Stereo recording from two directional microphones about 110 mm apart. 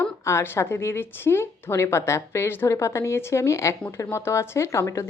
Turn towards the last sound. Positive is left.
turn(degrees=25)  # may be behind; listen again after turning